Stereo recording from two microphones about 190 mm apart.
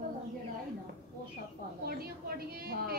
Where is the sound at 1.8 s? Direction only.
50° right (ahead or behind).